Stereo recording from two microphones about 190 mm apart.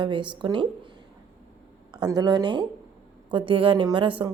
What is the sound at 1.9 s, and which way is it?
A woman's voice, 20° right (ahead or behind).